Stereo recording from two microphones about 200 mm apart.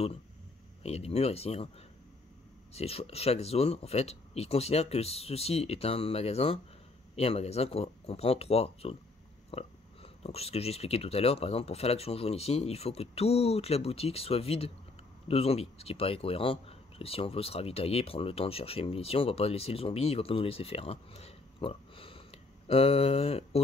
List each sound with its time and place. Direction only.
0.8 s speech: 30° left (ahead or behind)
2.7 s speech: 30° left (ahead or behind)